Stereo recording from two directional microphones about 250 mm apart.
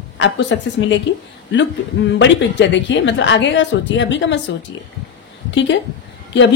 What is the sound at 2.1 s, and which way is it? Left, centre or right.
A woman's voice, left.